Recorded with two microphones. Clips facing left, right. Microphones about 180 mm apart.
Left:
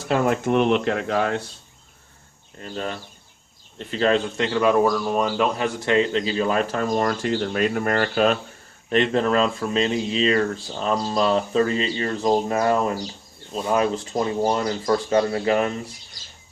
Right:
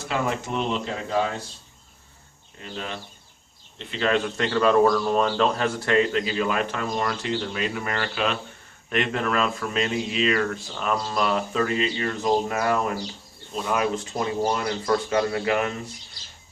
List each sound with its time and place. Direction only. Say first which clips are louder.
0.1 s speech: left 7 dB; 55° left (ahead or behind)
2.6 s speech: left 4 dB; 45° left (ahead or behind)
8.9 s speech: left 5 dB; 30° left (ahead or behind)